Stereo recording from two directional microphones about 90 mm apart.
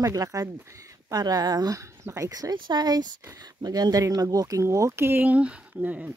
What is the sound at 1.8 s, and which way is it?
Speech, 35° right (ahead or behind).